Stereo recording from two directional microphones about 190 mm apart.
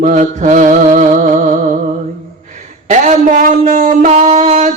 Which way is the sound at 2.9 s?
40° right (ahead or behind).